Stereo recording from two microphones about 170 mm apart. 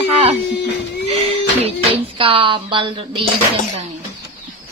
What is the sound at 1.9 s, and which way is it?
Speech, 30° right (ahead or behind).